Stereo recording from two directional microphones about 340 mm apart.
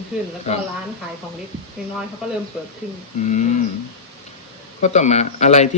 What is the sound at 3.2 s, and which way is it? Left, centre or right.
Speech, left.